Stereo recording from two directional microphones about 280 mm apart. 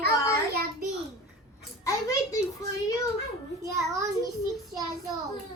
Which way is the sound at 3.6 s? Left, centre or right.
Centre.